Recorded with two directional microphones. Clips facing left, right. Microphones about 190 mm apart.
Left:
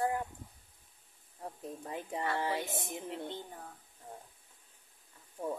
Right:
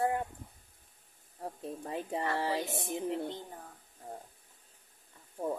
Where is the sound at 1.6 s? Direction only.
30° right (ahead or behind).